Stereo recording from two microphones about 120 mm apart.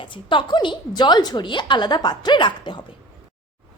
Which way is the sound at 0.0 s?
45° left (ahead or behind).